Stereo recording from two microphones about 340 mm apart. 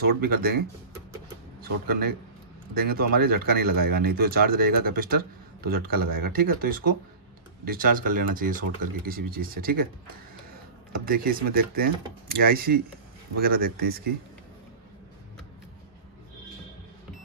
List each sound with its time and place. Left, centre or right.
0.0 s speech: right
10.9 s speech: right